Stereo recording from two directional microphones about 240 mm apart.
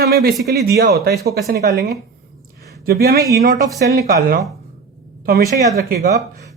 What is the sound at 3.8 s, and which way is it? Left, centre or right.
Speech, right.